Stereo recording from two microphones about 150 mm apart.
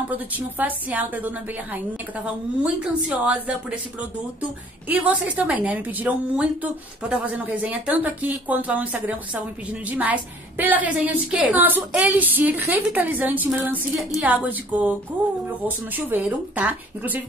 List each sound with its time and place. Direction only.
0.4 s a woman's voice: 10° right (ahead or behind)